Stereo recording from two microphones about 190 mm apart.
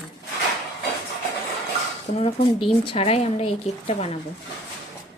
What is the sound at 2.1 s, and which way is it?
A woman's voice, 35° left (ahead or behind).